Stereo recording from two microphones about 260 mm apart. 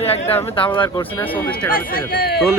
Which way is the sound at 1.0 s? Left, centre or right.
Centre.